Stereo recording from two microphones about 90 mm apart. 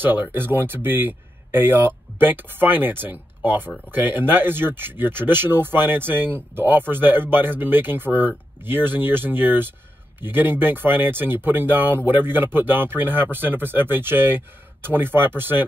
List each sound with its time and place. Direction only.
0.0 s speech: 25° right (ahead or behind)